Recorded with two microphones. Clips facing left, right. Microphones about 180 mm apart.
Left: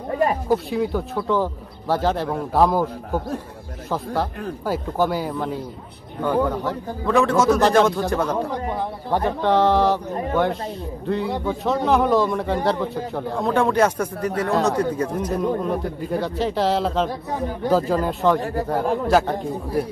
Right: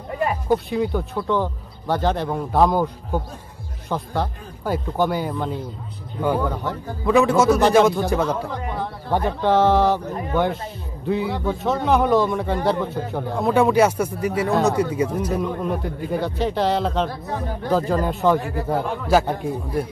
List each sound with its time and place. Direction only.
0.5 s a man's voice: centre (ahead or behind)
3.9 s a man's voice: 5° left (ahead or behind)
8.2 s speech: 10° left (ahead or behind)
9.1 s a man's voice: centre (ahead or behind)
18.4 s speech: 40° left (ahead or behind)
19.0 s a man's voice: centre (ahead or behind)